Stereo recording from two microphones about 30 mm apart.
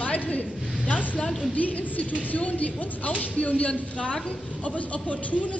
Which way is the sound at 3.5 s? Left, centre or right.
Left.